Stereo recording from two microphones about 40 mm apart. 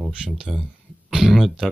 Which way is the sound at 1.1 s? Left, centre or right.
Centre.